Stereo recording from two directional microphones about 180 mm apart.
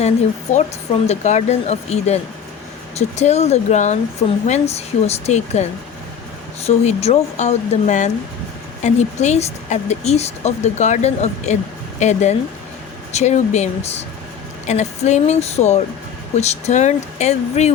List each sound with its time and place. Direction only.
0.5 s speech: 40° left (ahead or behind)